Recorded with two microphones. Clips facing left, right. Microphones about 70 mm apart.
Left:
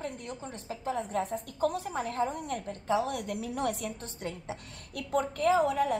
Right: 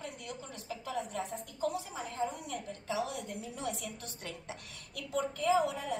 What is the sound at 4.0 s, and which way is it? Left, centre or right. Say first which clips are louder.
Speech: left 6 dB; left.